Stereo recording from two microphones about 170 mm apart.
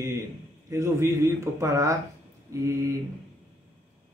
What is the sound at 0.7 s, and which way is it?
Speech, 15° right (ahead or behind).